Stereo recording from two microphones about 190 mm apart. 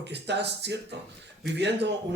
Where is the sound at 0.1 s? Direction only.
65° right (ahead or behind).